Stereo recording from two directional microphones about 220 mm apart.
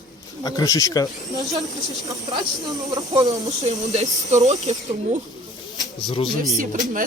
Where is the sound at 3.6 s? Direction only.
35° right (ahead or behind).